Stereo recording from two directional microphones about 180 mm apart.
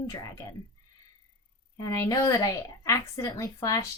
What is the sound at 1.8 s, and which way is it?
A woman's voice, 20° left (ahead or behind).